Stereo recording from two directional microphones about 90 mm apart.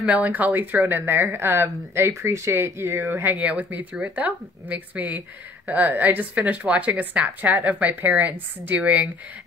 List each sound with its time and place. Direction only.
0.1 s speech: 20° right (ahead or behind)